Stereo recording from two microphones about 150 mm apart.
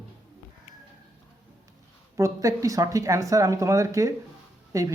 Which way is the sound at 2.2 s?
20° right (ahead or behind).